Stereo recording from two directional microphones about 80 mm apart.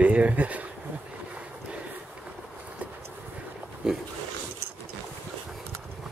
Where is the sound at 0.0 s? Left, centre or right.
Centre.